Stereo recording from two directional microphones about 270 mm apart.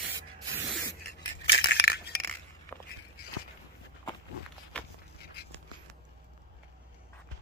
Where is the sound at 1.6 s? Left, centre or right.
Left.